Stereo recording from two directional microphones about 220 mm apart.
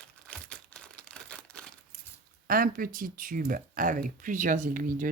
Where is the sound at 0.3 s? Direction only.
5° left (ahead or behind).